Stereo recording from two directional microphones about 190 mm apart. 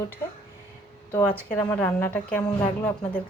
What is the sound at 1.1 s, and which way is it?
Speech, 10° left (ahead or behind).